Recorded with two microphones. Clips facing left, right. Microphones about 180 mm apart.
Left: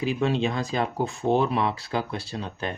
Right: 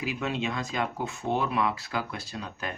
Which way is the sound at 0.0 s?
30° left (ahead or behind).